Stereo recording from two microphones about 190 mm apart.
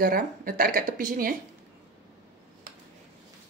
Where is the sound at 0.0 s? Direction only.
50° right (ahead or behind).